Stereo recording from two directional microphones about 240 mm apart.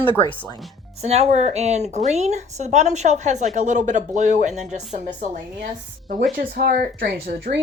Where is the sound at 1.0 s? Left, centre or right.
Right.